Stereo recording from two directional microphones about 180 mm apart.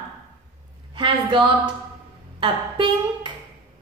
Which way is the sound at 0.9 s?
25° right (ahead or behind).